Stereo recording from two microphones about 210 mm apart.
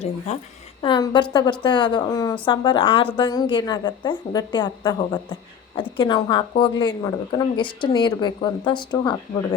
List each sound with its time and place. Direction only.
0.3 s a woman's voice: 30° left (ahead or behind)
0.8 s a woman's voice: 20° left (ahead or behind)